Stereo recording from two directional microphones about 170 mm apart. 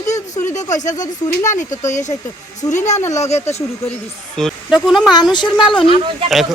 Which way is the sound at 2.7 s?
45° left (ahead or behind).